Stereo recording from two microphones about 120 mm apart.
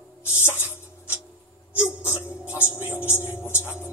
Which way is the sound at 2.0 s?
15° right (ahead or behind).